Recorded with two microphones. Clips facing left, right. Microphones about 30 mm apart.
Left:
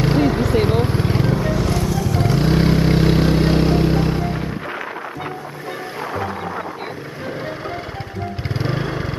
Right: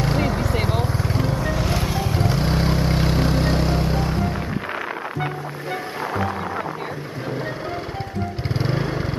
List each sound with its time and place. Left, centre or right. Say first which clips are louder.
0.0 s vehicle: left 5 dB; centre
0.7 s vehicle: left 5 dB; left
1.2 s vehicle: left 4 dB; centre
1.9 s vehicle: left 3 dB; right
2.1 s vehicle: left 6 dB; centre
8.5 s lawn mower: left 1 dB; centre